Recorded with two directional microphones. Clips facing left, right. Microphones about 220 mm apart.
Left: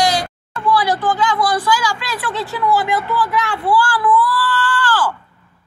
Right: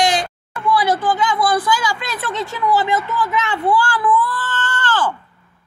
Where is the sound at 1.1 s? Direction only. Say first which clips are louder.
Even; 20° right (ahead or behind).